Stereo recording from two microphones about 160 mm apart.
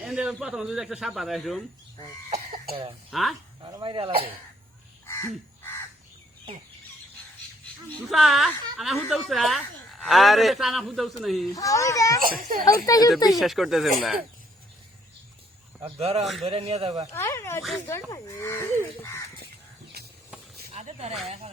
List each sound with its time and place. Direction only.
0.0 s speech: centre (ahead or behind)
3.1 s speech: centre (ahead or behind)
3.6 s speech: 30° right (ahead or behind)
5.0 s crow: 15° left (ahead or behind)
8.1 s speech: centre (ahead or behind)
11.5 s a child's voice: 20° left (ahead or behind)
12.2 s a child's voice: 65° right (ahead or behind)
12.8 s a child's voice: 20° left (ahead or behind)
13.4 s speech: centre (ahead or behind)
15.8 s speech: 40° right (ahead or behind)
16.2 s speech: centre (ahead or behind)
16.5 s speech: 40° right (ahead or behind)
17.2 s speech: 15° left (ahead or behind)
20.7 s a sound: 45° right (ahead or behind)